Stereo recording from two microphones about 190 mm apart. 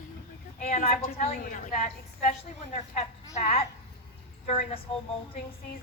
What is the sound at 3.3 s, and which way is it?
A woman's voice, 30° left (ahead or behind).